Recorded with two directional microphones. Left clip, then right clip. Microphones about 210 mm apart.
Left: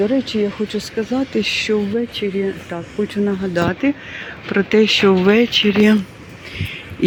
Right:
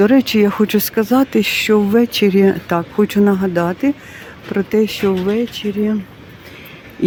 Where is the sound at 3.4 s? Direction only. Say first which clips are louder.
Right 2 dB; 20° right (ahead or behind).